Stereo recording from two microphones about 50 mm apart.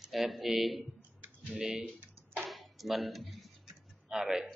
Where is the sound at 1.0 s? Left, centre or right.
Right.